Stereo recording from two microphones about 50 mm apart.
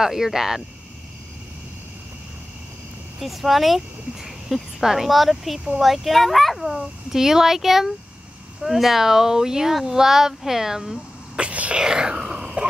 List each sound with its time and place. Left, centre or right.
0.0 s speech: centre
3.2 s speech: centre
11.3 s speech: right
11.8 s speech: centre